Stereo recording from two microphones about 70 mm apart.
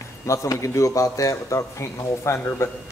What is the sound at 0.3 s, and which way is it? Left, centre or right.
A man's voice, left.